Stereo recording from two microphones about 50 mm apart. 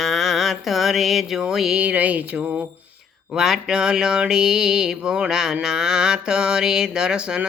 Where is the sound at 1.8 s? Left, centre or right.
Right.